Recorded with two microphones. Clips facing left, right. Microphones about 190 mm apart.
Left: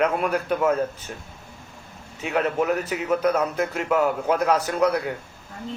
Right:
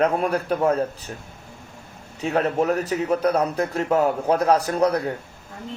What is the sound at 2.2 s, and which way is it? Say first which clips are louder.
A man's voice: right 2 dB; 35° right (ahead or behind).